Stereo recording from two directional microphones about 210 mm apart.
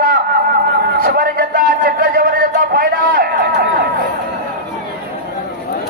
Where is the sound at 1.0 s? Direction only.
45° right (ahead or behind).